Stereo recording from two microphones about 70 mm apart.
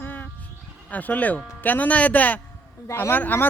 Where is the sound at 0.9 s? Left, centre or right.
Left.